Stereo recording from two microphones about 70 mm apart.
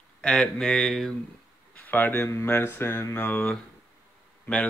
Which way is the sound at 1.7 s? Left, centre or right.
Left.